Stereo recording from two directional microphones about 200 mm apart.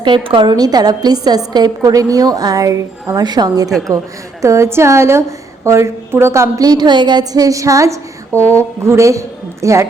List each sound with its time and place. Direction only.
0.0 s a woman's voice: 25° right (ahead or behind)
3.7 s a woman's voice: centre (ahead or behind)
4.4 s a woman's voice: 15° right (ahead or behind)